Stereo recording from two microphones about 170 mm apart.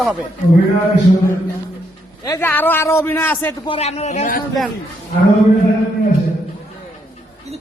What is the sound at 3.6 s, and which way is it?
Speech, 35° left (ahead or behind).